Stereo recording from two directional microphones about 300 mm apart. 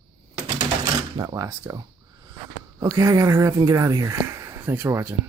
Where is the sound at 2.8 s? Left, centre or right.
Centre.